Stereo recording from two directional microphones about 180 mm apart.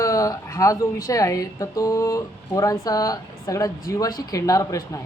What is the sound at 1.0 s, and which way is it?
Speech, 15° left (ahead or behind).